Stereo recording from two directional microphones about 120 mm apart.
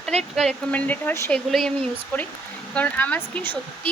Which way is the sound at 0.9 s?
20° left (ahead or behind).